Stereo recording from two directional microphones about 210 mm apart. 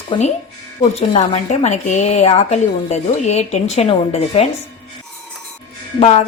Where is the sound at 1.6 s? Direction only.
30° left (ahead or behind).